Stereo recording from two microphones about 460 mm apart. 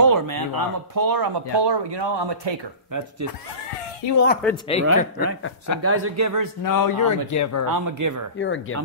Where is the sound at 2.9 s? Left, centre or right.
Right.